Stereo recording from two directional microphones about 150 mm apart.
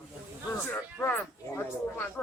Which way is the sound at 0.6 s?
15° left (ahead or behind).